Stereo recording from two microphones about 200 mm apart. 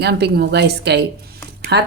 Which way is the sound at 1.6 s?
55° right (ahead or behind).